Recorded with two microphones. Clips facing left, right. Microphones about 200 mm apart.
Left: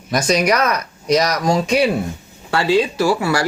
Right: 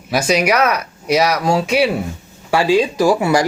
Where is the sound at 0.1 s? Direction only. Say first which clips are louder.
Right 1 dB; 5° right (ahead or behind).